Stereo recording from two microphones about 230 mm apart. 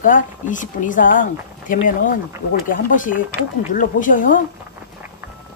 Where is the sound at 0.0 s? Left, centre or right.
Left.